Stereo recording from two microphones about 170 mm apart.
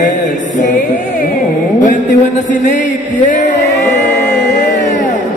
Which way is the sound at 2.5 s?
50° left (ahead or behind).